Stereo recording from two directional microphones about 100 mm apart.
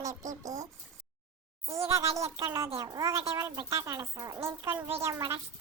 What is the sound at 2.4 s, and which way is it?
Speech, 25° right (ahead or behind).